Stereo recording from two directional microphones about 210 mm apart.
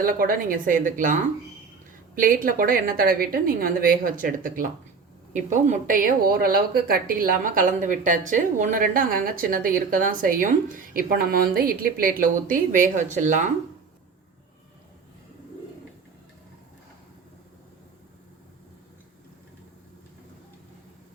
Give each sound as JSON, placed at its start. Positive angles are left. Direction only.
{"t": 0.0, "sound": "a woman's voice", "side_deg": -45}